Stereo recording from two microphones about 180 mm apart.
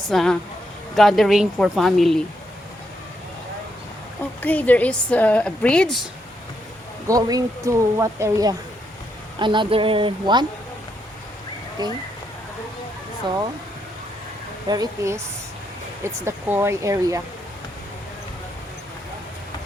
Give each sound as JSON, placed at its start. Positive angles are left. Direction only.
{"t": 0.1, "sound": "speech", "side_deg": 0}
{"t": 4.2, "sound": "a woman's voice", "side_deg": 10}
{"t": 7.1, "sound": "speech", "side_deg": -20}
{"t": 11.8, "sound": "speech", "side_deg": -20}
{"t": 14.7, "sound": "speech", "side_deg": -20}
{"t": 16.2, "sound": "speech", "side_deg": -15}